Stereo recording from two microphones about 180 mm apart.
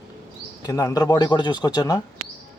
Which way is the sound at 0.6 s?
20° left (ahead or behind).